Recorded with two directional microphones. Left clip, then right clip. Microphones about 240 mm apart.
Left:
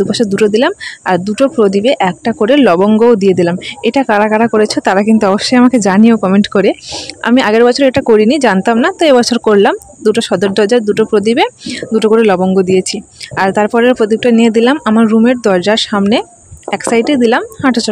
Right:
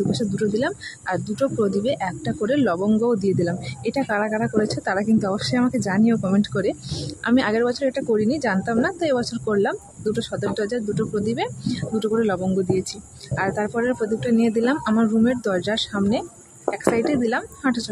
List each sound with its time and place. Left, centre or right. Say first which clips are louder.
0.1 s speech: left 13 dB; left